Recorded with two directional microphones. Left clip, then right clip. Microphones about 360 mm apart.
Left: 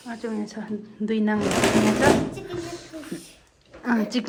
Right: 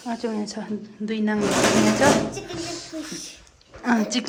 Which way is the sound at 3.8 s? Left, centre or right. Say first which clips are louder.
Right 2 dB; centre.